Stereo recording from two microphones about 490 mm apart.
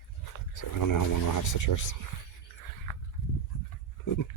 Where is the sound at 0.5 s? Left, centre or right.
Left.